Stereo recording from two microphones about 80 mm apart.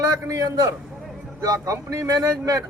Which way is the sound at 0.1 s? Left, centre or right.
Right.